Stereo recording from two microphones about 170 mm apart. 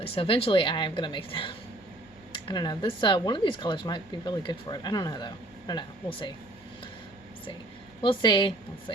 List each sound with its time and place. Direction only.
0.0 s speech: 35° left (ahead or behind)
8.0 s speech: 25° left (ahead or behind)